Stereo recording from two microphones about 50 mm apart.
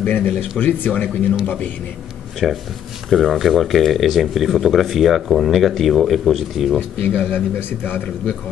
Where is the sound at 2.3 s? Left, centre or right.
Centre.